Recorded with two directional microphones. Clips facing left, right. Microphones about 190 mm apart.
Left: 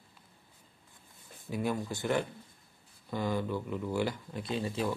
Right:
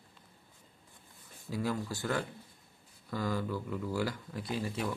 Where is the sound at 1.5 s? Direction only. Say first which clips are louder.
Left 1 dB; 20° left (ahead or behind).